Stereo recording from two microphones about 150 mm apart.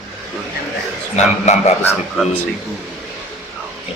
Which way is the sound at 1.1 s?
50° left (ahead or behind).